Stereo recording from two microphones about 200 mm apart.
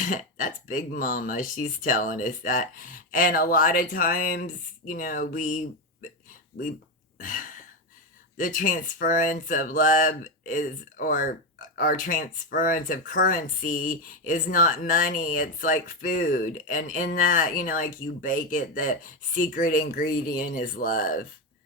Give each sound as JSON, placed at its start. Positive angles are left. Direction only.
{"t": 0.0, "sound": "speech", "side_deg": 40}
{"t": 7.2, "sound": "speech", "side_deg": 40}